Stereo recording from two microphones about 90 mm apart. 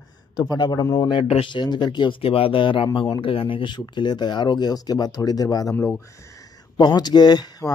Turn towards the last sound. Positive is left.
turn(degrees=50)  # may be behind; listen again after turning